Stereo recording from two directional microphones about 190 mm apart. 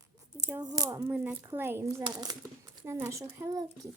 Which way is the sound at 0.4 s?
20° right (ahead or behind).